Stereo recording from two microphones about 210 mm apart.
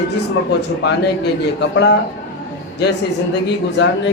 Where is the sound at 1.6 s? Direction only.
55° left (ahead or behind).